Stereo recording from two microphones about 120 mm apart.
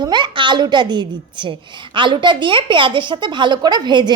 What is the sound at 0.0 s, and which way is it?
Speech, 40° right (ahead or behind).